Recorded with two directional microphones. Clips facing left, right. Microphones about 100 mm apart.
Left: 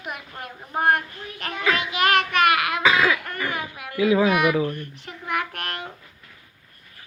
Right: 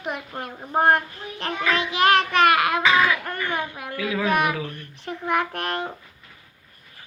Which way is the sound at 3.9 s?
20° left (ahead or behind).